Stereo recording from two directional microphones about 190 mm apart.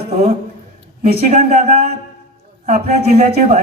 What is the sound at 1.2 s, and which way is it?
Speech, 35° right (ahead or behind).